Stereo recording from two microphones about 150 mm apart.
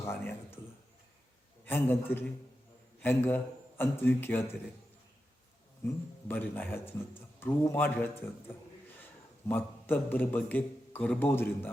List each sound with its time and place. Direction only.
0.0 s speech: 15° left (ahead or behind)
1.6 s a man's voice: 15° left (ahead or behind)
6.2 s a man's voice: 15° left (ahead or behind)
9.5 s a man's voice: 15° left (ahead or behind)